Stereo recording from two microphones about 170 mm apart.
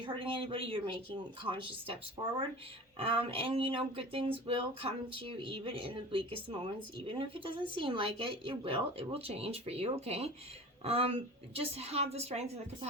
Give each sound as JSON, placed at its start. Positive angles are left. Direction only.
{"t": 0.0, "sound": "speech", "side_deg": -30}
{"t": 3.0, "sound": "speech", "side_deg": -35}